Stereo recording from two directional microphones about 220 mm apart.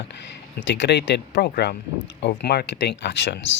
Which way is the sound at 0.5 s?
50° left (ahead or behind).